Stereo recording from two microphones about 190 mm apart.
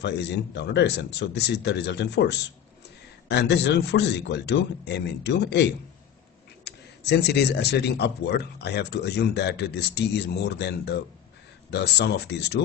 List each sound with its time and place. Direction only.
0.0 s speech: 65° left (ahead or behind)